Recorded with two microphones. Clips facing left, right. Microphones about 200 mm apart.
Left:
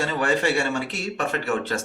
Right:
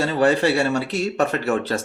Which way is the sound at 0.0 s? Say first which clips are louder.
Right 5 dB; 35° right (ahead or behind).